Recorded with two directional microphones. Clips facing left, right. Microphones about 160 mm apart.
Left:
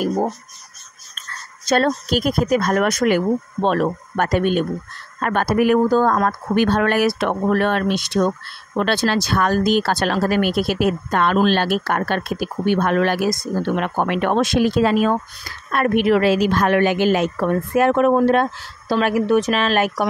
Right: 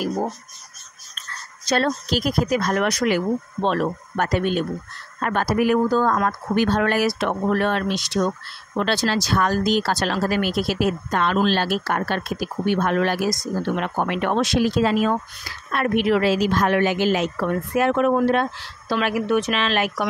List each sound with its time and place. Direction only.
1.7 s a woman's voice: 50° left (ahead or behind)